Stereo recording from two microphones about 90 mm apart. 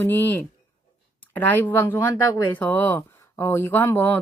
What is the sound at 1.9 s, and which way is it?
Speech, 35° left (ahead or behind).